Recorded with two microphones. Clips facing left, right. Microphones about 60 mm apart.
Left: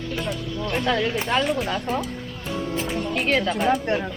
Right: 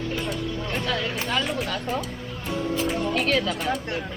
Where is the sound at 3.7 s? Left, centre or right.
Left.